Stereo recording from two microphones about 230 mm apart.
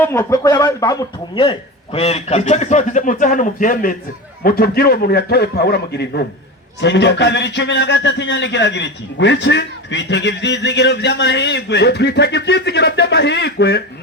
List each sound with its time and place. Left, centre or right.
0.0 s a man's voice: centre; by 13.8 s left